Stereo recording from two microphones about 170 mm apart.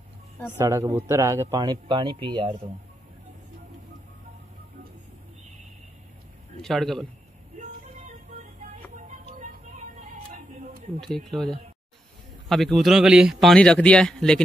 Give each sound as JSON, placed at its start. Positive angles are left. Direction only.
{"t": 0.6, "sound": "speech", "side_deg": -20}
{"t": 6.6, "sound": "speech", "side_deg": 0}
{"t": 8.9, "sound": "music", "side_deg": -45}
{"t": 11.0, "sound": "speech", "side_deg": 0}